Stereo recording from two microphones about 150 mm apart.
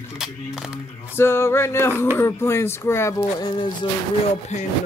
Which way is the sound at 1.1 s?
15° left (ahead or behind).